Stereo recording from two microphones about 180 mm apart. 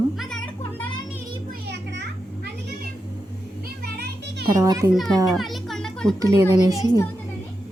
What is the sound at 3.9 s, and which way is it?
Children playing, 60° right (ahead or behind).